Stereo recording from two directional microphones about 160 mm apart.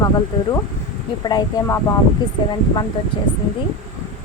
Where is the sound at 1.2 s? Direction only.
25° left (ahead or behind).